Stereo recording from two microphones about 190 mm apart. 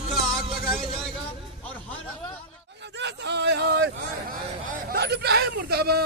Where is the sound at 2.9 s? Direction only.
65° right (ahead or behind).